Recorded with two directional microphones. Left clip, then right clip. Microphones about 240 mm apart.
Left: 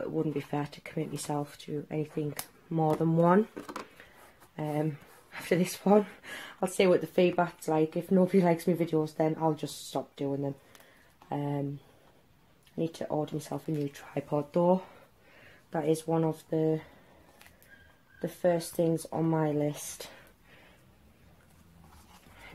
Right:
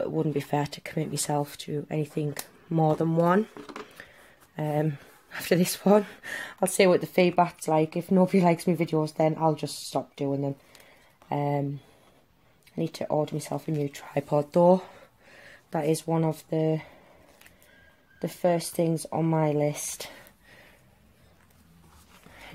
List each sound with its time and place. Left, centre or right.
0.0 s speech: right
4.6 s speech: right
12.7 s speech: right
18.2 s speech: right